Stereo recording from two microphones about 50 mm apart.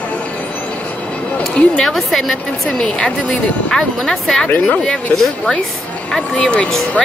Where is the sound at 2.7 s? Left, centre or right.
Centre.